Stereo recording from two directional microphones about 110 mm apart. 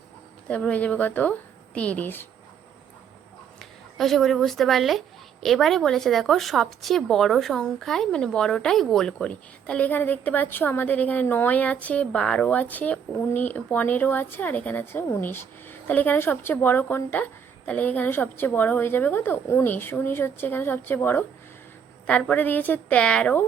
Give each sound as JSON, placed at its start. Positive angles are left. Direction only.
{"t": 0.4, "sound": "speech", "side_deg": 10}
{"t": 3.6, "sound": "a woman's voice", "side_deg": 0}